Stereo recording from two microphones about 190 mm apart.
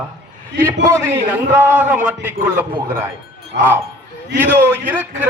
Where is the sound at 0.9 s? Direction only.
15° right (ahead or behind).